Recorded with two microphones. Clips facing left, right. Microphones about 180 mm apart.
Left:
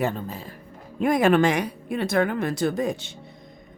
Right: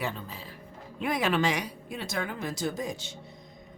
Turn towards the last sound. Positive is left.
turn(degrees=60)  # may be behind; listen again after turning